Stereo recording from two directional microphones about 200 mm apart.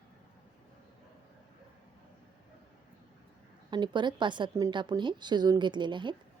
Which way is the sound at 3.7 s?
25° right (ahead or behind).